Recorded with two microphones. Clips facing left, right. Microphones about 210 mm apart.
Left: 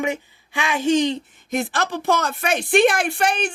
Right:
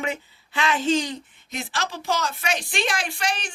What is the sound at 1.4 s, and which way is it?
A woman's voice, 50° left (ahead or behind).